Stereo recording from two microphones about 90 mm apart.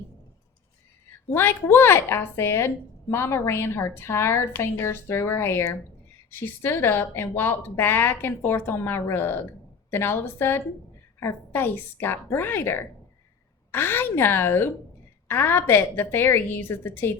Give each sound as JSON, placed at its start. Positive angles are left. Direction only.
{"t": 1.3, "sound": "a woman's voice", "side_deg": 25}